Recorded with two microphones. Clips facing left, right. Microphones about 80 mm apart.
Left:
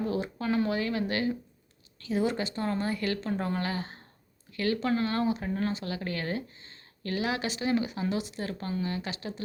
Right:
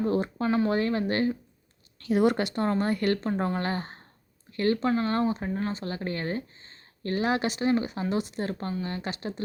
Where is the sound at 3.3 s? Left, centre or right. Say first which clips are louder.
Right 3 dB; right.